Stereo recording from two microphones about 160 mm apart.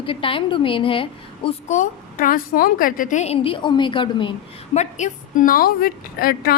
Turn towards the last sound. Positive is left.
turn(degrees=65)  # may be behind; listen again after turning